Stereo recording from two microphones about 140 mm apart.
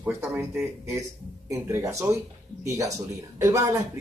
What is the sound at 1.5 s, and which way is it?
Speech, 20° right (ahead or behind).